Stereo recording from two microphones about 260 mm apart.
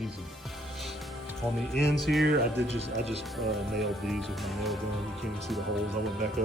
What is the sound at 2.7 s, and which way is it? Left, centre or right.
Speech, right.